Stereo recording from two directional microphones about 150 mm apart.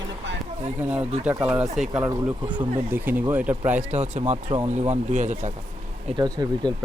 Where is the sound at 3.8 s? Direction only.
50° right (ahead or behind).